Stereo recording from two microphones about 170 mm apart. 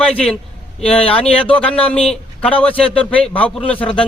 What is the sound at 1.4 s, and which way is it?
A man's voice, 5° left (ahead or behind).